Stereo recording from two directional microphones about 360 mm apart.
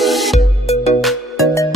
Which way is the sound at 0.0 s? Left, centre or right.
Centre.